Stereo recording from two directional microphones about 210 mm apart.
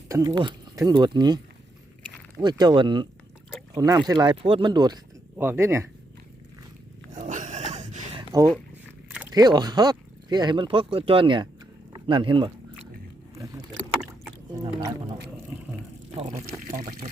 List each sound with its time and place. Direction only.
0.1 s speech: 15° right (ahead or behind)
2.4 s speech: 20° right (ahead or behind)
7.1 s dog: 35° right (ahead or behind)
8.3 s speech: 15° right (ahead or behind)
9.0 s biting: 5° right (ahead or behind)
9.3 s speech: 20° right (ahead or behind)
11.9 s biting: 25° right (ahead or behind)